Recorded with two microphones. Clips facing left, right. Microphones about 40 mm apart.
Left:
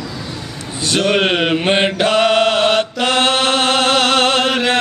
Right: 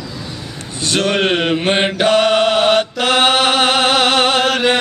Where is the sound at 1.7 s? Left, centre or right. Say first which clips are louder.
Right 2 dB; centre.